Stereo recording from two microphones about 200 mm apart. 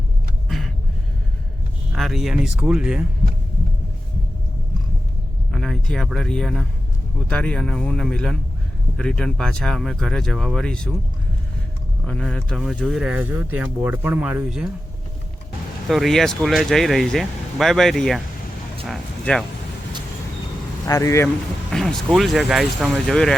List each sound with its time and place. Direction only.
0.4 s a sound: centre (ahead or behind)
1.9 s speech: centre (ahead or behind)
5.5 s speech: centre (ahead or behind)
12.0 s speech: 5° left (ahead or behind)
15.9 s speech: centre (ahead or behind)
20.8 s speech: 15° left (ahead or behind)
21.7 s speech: 5° left (ahead or behind)